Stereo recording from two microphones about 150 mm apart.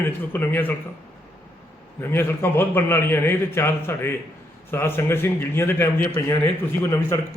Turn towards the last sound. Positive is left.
turn(degrees=15)  # may be behind; listen again after turning